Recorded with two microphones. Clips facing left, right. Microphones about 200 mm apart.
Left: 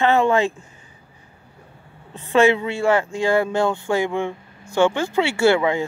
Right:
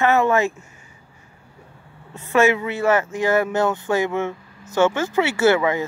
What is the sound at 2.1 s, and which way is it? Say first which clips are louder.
Speech: left 1 dB; 20° left (ahead or behind).